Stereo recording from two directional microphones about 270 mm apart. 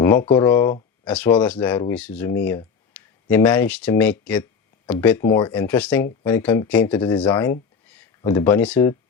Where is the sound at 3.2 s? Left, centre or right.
Centre.